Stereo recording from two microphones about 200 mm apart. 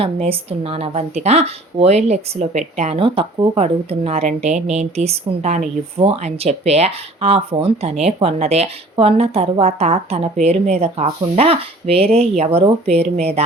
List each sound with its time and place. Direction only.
0.0 s speech: 30° right (ahead or behind)